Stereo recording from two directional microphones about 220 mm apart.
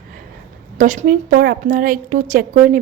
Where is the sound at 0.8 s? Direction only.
35° right (ahead or behind).